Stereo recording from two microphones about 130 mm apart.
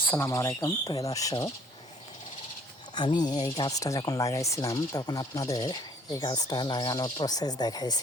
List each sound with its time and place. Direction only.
0.0 s speech: 15° left (ahead or behind)
2.9 s speech: 35° left (ahead or behind)